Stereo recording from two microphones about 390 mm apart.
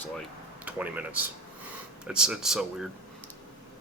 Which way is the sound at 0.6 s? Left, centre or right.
Centre.